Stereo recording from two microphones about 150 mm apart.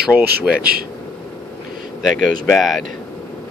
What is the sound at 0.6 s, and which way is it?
Speech, 80° right.